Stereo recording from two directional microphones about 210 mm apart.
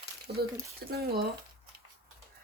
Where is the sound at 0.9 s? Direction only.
50° right (ahead or behind).